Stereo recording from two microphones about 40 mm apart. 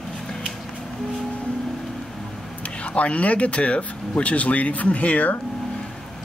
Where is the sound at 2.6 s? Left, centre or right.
Left.